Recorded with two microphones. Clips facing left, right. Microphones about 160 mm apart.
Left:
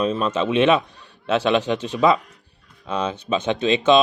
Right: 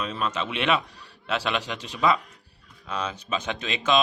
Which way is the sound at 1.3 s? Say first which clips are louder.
Left 9 dB; 25° left (ahead or behind).